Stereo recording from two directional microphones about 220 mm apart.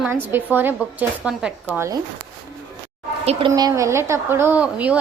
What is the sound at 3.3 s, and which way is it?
A woman's voice, 25° right (ahead or behind).